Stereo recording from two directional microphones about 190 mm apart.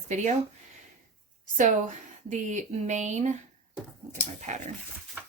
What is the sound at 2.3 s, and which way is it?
Speech, 40° right (ahead or behind).